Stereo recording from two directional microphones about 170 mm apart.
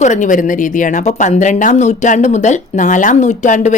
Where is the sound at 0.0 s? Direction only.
45° left (ahead or behind).